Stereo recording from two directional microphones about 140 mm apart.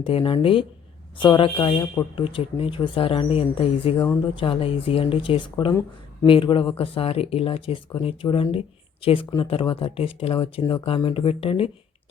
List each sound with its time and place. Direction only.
0.0 s speech: 40° left (ahead or behind)